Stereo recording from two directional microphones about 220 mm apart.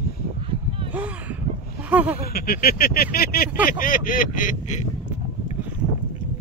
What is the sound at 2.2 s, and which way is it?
Speech, 45° left (ahead or behind).